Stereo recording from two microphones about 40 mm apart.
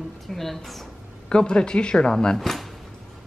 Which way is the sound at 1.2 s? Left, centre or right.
Left.